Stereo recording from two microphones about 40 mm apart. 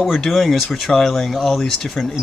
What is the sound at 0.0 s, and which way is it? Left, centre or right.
Speech, centre.